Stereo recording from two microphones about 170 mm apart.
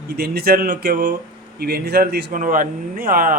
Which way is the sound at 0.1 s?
65° right (ahead or behind).